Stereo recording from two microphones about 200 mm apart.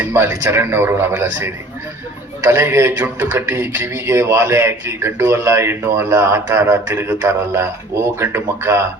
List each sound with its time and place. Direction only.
0.0 s speech: 10° right (ahead or behind)